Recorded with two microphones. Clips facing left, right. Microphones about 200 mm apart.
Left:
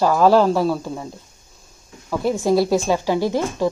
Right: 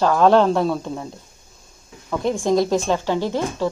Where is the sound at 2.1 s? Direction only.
5° left (ahead or behind).